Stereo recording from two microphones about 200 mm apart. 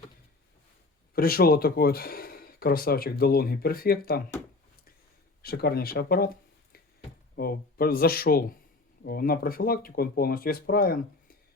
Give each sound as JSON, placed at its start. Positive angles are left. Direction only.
{"t": 1.1, "sound": "speech", "side_deg": 50}
{"t": 5.4, "sound": "speech", "side_deg": 50}
{"t": 7.3, "sound": "speech", "side_deg": 50}